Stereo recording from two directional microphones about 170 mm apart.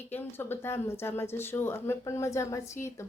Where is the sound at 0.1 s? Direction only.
10° left (ahead or behind).